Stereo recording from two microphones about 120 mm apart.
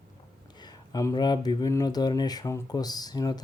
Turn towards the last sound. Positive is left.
turn(degrees=35)  # may be behind; listen again after turning